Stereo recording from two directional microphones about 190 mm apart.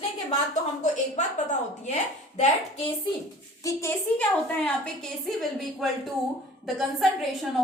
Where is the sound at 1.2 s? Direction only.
40° left (ahead or behind).